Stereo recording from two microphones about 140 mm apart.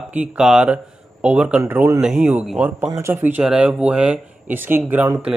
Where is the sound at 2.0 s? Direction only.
5° right (ahead or behind).